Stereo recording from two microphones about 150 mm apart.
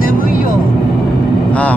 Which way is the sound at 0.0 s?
70° left (ahead or behind).